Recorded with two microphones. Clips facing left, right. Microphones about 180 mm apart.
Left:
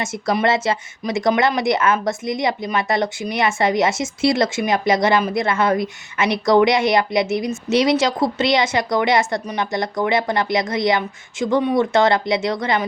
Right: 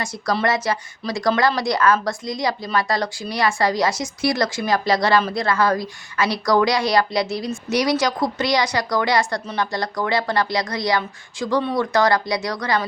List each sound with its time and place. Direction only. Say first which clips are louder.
0.0 s a woman's voice: left 3 dB; 25° left (ahead or behind)